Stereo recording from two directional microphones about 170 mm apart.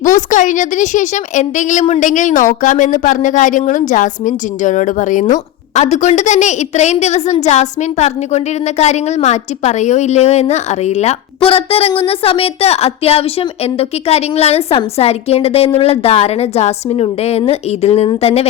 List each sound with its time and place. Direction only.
0.0 s a woman's voice: 50° left (ahead or behind)